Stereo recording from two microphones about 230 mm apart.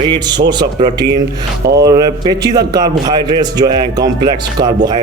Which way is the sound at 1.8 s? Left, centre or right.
Centre.